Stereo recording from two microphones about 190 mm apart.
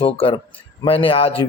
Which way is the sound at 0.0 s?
30° left (ahead or behind).